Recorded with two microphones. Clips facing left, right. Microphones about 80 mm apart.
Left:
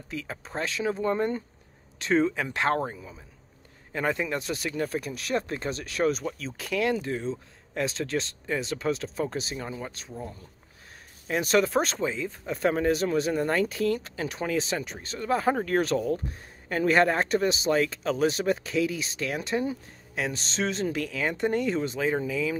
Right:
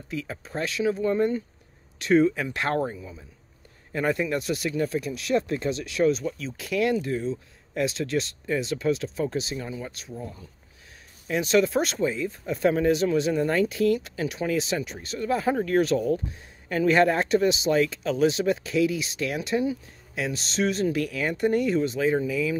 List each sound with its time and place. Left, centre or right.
0.3 s speech: left
6.8 s speech: left
12.5 s speech: left